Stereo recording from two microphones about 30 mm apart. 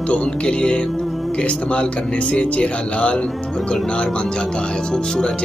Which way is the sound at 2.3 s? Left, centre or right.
Left.